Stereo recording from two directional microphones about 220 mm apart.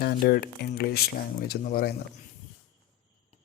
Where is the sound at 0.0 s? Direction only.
45° left (ahead or behind).